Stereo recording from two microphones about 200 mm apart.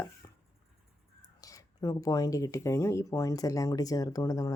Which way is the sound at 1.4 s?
15° left (ahead or behind).